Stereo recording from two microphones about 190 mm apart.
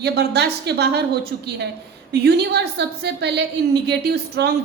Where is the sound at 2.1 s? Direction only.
60° right (ahead or behind).